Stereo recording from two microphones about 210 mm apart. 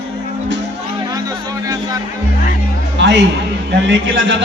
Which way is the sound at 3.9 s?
60° right (ahead or behind).